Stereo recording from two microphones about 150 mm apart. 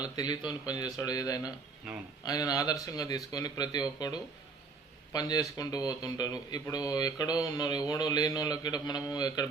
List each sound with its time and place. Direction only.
0.0 s speech: 25° left (ahead or behind)
1.9 s speech: 5° right (ahead or behind)
2.2 s speech: 25° left (ahead or behind)